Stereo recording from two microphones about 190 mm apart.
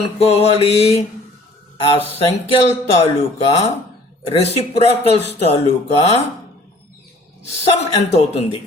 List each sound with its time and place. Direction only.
0.2 s speech: 35° left (ahead or behind)
7.6 s speech: 35° left (ahead or behind)